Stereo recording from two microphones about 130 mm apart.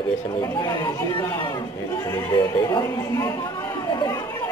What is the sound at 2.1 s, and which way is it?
Speech, 30° left (ahead or behind).